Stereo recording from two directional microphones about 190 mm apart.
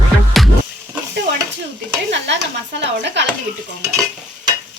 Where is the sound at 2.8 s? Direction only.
65° right (ahead or behind).